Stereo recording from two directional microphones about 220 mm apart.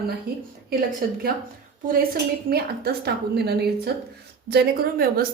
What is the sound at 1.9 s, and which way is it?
A woman's voice, 40° right (ahead or behind).